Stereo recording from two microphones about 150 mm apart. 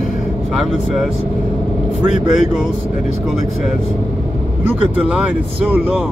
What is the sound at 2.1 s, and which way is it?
Speech, 55° left (ahead or behind).